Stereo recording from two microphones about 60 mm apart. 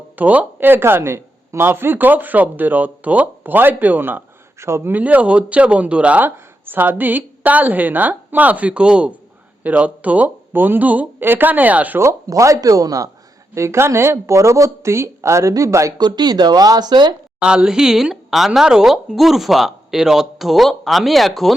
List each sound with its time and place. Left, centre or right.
0.2 s a woman's voice: right
0.7 s speech: right
4.6 s speech: right
4.9 s a woman's voice: right
6.2 s a woman's voice: right
11.9 s speech: right
13.5 s speech: right
16.3 s speech: right
17.4 s speech: centre